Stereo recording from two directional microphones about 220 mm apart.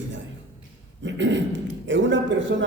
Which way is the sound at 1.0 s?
55° right (ahead or behind).